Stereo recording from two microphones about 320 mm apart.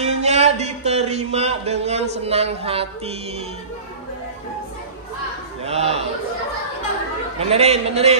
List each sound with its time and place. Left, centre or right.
0.0 s a sound: right
2.1 s mantra: centre
5.6 s mantra: centre
7.3 s mantra: centre